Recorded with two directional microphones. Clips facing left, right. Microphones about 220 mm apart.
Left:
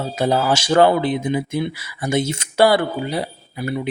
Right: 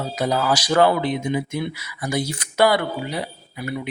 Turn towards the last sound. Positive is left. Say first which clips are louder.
# left 4 dB
turn(degrees=30)  # may be behind; listen again after turning